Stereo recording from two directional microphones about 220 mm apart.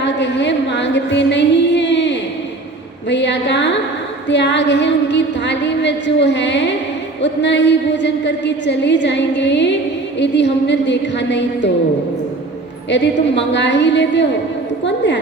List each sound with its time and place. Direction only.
0.0 s music: 55° left (ahead or behind)
3.1 s a woman's voice: 55° left (ahead or behind)
12.9 s a woman's voice: 55° left (ahead or behind)
14.8 s a sound: 55° left (ahead or behind)